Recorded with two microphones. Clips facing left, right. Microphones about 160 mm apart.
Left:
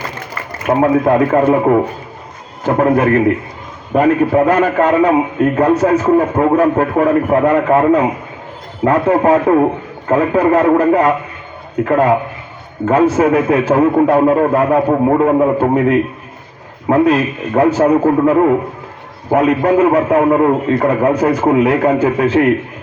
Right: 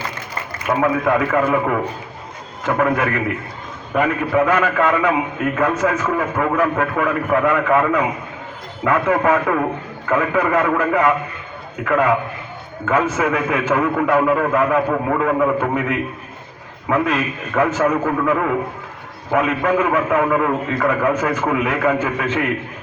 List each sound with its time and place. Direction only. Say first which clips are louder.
0.7 s a man's voice: left 6 dB; 30° left (ahead or behind)